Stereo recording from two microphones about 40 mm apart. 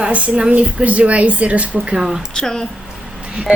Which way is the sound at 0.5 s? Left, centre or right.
Right.